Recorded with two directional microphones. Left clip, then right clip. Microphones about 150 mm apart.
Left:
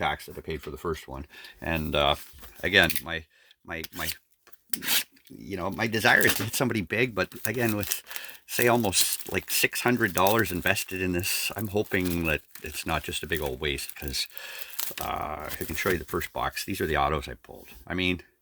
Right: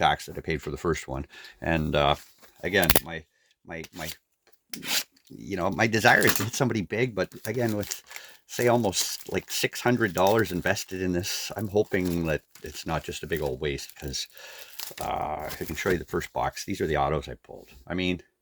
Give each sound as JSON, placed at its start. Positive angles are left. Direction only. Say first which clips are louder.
{"t": 0.0, "sound": "speech", "louder": "right 5 dB", "side_deg": -20}
{"t": 0.4, "sound": "speech", "louder": "right 4 dB", "side_deg": -40}
{"t": 1.1, "sound": "speech", "louder": "right 4 dB", "side_deg": -15}
{"t": 2.6, "sound": "speech", "louder": "left 2 dB", "side_deg": 20}
{"t": 5.5, "sound": "speech", "louder": "right 4 dB", "side_deg": -5}
{"t": 6.8, "sound": "speech", "louder": "left 1 dB", "side_deg": 20}
{"t": 8.2, "sound": "speech", "louder": "even", "side_deg": 20}